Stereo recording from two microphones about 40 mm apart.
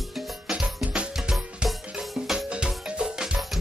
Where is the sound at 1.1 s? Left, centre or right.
Centre.